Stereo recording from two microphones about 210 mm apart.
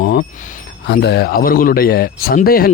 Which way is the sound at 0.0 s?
50° left (ahead or behind).